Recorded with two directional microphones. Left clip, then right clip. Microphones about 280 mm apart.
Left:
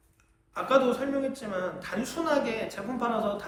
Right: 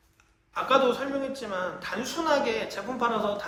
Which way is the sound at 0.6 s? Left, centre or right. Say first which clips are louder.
Right 1 dB; centre.